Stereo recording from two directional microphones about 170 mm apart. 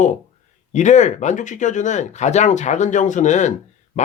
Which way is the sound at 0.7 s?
45° left (ahead or behind).